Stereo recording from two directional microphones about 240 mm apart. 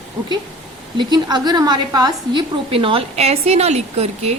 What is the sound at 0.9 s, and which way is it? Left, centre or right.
A woman's voice, centre.